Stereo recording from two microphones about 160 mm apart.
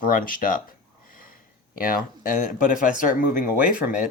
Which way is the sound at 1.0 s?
60° left (ahead or behind).